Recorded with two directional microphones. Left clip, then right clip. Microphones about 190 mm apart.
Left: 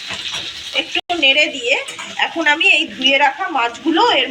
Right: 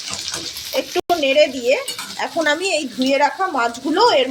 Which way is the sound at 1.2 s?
65° right (ahead or behind).